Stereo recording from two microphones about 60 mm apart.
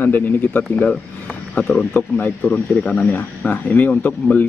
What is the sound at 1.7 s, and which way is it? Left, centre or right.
Speech, left.